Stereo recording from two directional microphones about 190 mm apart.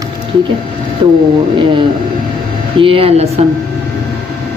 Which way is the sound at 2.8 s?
30° right (ahead or behind).